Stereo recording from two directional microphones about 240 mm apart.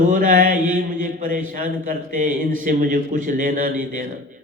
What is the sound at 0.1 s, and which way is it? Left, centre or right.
Speech, right.